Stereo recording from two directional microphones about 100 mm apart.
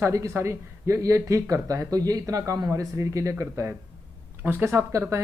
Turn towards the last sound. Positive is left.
turn(degrees=-25)  # may be behind; listen again after turning